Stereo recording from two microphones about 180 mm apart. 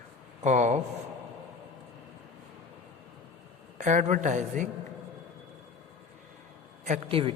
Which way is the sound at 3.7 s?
45° right (ahead or behind).